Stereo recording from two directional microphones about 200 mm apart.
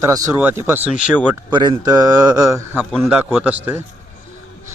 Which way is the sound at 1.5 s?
20° right (ahead or behind).